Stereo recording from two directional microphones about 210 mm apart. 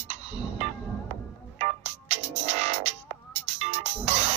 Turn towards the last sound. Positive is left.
turn(degrees=-30)  # may be behind; listen again after turning